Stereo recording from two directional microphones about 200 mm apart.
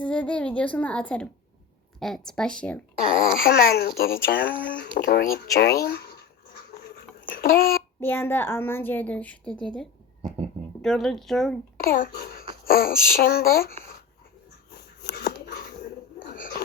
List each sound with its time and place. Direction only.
0.0 s speech: 5° left (ahead or behind)
3.1 s a child's voice: 45° left (ahead or behind)
6.8 s a sound: 50° left (ahead or behind)
8.0 s speech: 10° left (ahead or behind)
10.8 s speech: centre (ahead or behind)
11.8 s a child's voice: 45° left (ahead or behind)
14.7 s a sound: 50° left (ahead or behind)